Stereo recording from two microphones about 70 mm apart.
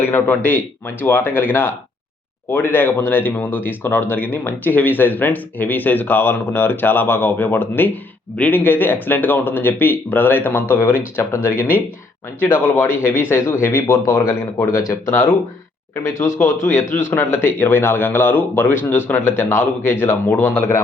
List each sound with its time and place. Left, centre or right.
0.1 s speech: left
15.0 s speech: left
16.0 s speech: left
16.9 s speech: left